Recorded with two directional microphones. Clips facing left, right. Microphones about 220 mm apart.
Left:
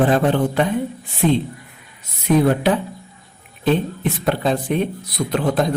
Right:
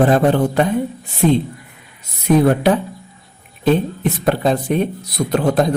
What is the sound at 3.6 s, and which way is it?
A man's voice, 40° right (ahead or behind).